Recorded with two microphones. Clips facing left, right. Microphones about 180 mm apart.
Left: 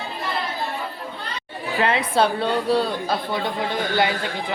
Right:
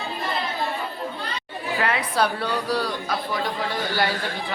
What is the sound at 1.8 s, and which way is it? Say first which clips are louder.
Speech: left 4 dB; 25° left (ahead or behind).